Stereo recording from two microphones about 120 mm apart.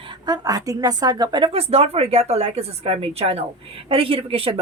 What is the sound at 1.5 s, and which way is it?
Speech, 55° right (ahead or behind).